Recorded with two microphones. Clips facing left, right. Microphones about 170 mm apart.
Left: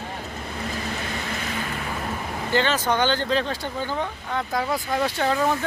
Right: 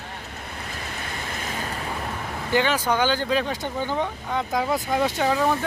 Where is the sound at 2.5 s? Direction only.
10° right (ahead or behind).